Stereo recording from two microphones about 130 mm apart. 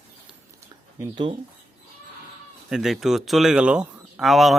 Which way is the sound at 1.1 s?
40° right (ahead or behind).